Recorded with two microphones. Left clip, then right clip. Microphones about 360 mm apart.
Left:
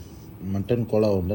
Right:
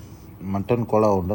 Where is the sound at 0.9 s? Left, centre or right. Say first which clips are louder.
Right 3 dB; centre.